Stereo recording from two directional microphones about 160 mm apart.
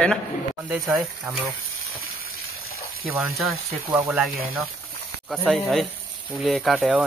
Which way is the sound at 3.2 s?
Centre (ahead or behind).